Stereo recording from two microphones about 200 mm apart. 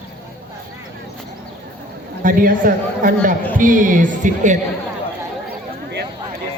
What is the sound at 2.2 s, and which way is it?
A man's voice, 45° right (ahead or behind).